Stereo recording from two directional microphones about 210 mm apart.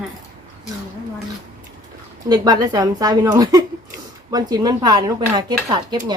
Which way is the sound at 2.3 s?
20° right (ahead or behind).